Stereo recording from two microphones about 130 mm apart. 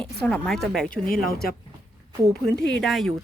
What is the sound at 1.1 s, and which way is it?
Speech, 90° left.